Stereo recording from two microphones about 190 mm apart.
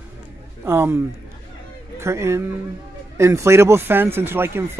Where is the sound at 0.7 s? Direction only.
15° right (ahead or behind).